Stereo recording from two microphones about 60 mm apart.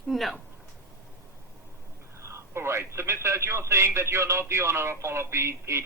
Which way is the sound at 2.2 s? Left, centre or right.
Right.